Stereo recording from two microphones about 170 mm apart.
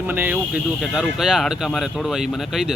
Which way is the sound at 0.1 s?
10° right (ahead or behind).